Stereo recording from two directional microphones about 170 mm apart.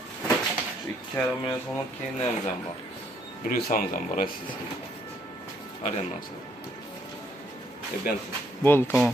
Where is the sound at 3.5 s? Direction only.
55° left (ahead or behind).